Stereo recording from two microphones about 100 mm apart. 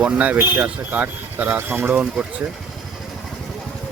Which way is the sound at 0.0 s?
15° right (ahead or behind).